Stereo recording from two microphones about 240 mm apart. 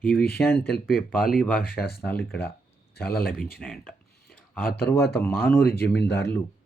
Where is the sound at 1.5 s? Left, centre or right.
Left.